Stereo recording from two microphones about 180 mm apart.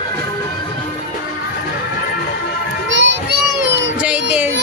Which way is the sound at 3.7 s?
90° right.